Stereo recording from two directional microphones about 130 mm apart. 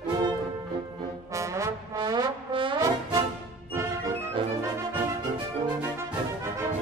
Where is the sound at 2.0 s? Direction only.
35° right (ahead or behind).